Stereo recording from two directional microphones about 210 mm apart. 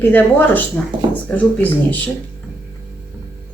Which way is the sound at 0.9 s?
20° right (ahead or behind).